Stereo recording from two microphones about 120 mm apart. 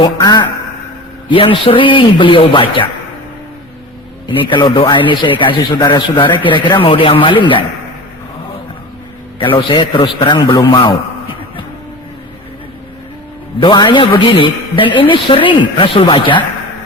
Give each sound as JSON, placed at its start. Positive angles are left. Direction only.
{"t": 0.0, "sound": "a sound", "side_deg": 35}
{"t": 1.3, "sound": "a man's voice", "side_deg": 50}
{"t": 4.3, "sound": "a man's voice", "side_deg": 40}
{"t": 9.4, "sound": "a man's voice", "side_deg": 45}
{"t": 10.4, "sound": "a man's voice", "side_deg": 35}
{"t": 13.6, "sound": "a man's voice", "side_deg": 40}